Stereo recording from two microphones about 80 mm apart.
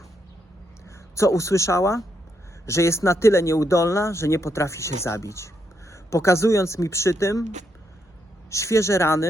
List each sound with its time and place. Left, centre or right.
0.9 s speech: left
8.4 s speech: left